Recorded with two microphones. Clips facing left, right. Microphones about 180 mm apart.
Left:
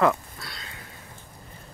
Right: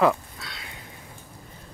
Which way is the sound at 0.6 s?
20° right (ahead or behind).